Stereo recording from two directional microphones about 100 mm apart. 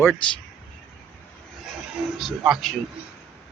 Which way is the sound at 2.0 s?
5° right (ahead or behind).